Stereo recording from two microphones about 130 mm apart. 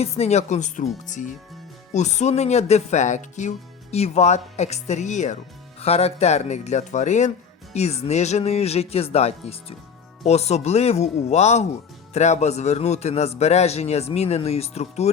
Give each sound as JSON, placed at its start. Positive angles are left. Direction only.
{"t": 0.0, "sound": "a man's voice", "side_deg": 55}
{"t": 1.9, "sound": "a man's voice", "side_deg": 60}
{"t": 3.9, "sound": "a man's voice", "side_deg": 55}
{"t": 5.8, "sound": "a man's voice", "side_deg": 50}